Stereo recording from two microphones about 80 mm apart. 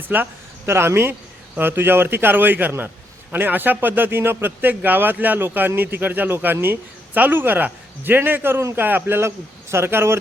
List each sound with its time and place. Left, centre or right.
0.0 s a man's voice: right